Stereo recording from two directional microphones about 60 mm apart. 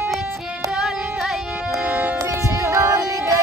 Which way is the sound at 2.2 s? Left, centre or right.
Right.